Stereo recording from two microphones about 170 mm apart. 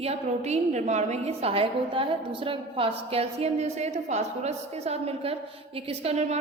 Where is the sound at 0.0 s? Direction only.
40° right (ahead or behind).